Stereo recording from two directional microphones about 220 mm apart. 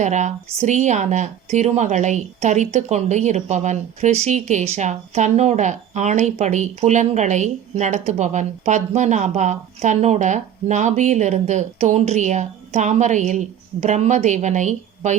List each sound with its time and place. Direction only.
0.0 s speech: 35° right (ahead or behind)